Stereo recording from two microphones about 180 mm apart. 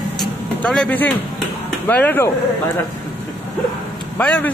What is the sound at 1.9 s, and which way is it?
Speech, 10° left (ahead or behind).